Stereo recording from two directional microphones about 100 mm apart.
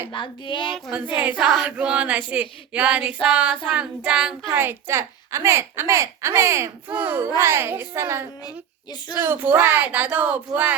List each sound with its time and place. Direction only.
0.1 s speech: 55° left (ahead or behind)
0.9 s speech: 15° right (ahead or behind)
4.5 s a woman's voice: 20° right (ahead or behind)
8.4 s a woman's voice: 45° left (ahead or behind)
9.1 s speech: 20° right (ahead or behind)